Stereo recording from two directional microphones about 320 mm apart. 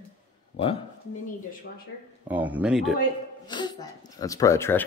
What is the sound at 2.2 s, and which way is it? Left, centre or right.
Speech, centre.